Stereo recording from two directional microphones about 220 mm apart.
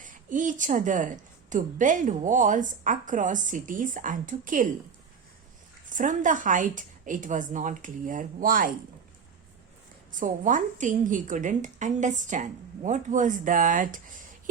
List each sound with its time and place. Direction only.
0.0 s a woman's voice: 35° right (ahead or behind)
5.9 s a woman's voice: 35° right (ahead or behind)
10.1 s a woman's voice: 35° right (ahead or behind)